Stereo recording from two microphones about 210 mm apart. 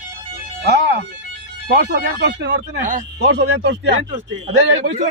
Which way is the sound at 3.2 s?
55° right (ahead or behind).